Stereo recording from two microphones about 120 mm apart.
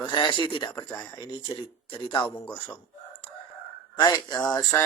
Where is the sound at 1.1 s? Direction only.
40° left (ahead or behind).